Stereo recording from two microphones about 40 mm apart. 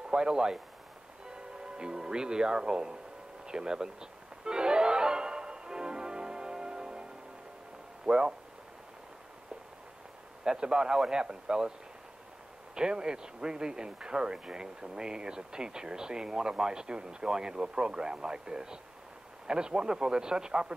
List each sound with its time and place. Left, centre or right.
0.1 s speech: right
3.4 s music: centre
8.0 s speech: right
10.4 s speech: centre
12.7 s speech: centre